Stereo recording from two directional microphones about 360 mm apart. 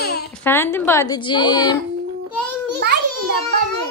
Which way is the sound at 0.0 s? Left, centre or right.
Left.